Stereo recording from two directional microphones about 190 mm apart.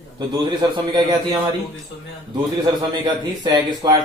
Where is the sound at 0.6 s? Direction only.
20° right (ahead or behind).